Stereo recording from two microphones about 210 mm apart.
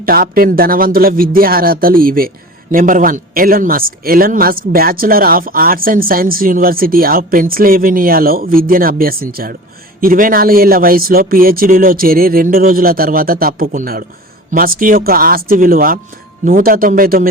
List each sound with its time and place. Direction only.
0.0 s a man's voice: 45° right (ahead or behind)